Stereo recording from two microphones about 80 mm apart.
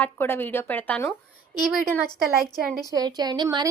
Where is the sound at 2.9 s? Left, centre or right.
Right.